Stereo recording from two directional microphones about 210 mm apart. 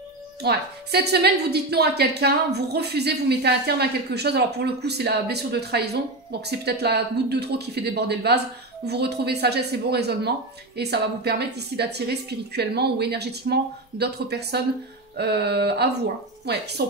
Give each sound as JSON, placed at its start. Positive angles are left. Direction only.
{"t": 0.4, "sound": "a woman's voice", "side_deg": -50}